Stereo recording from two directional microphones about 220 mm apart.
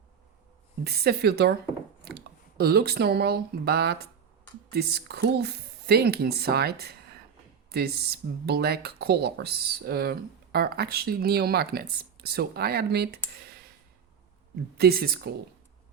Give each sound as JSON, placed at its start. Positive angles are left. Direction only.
{"t": 0.9, "sound": "speech", "side_deg": -45}
{"t": 13.4, "sound": "a sound", "side_deg": -45}
{"t": 14.8, "sound": "speech", "side_deg": -45}